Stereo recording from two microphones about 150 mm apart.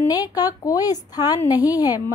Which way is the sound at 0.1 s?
25° left (ahead or behind).